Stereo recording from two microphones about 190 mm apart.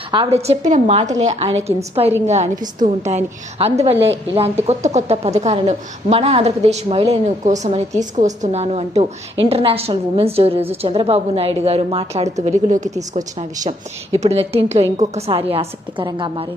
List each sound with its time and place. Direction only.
0.1 s a woman's voice: 30° right (ahead or behind)
14.2 s a woman's voice: 35° right (ahead or behind)